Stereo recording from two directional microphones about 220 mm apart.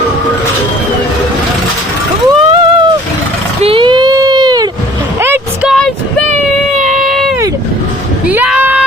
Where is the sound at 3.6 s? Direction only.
25° right (ahead or behind); by 5.8 s 5° right (ahead or behind).